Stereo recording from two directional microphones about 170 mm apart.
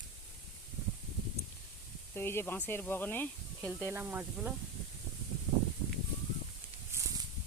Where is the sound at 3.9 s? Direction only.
10° right (ahead or behind).